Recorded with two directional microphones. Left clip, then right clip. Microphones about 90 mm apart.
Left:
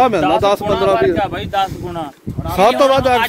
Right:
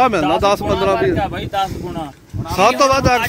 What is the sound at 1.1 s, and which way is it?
Speech, 65° right (ahead or behind).